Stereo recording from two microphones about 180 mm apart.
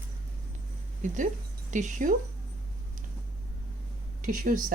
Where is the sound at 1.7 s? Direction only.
40° right (ahead or behind).